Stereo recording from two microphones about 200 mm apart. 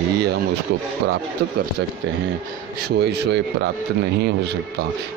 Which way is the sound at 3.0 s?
55° right (ahead or behind).